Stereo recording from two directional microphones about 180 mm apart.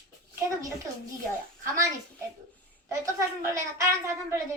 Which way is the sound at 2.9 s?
20° right (ahead or behind).